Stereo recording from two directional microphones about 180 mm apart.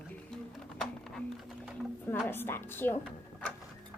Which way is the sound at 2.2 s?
10° left (ahead or behind).